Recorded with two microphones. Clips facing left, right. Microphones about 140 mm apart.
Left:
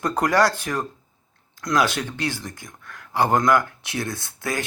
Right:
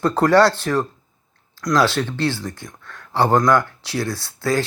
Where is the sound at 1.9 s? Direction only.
60° right (ahead or behind).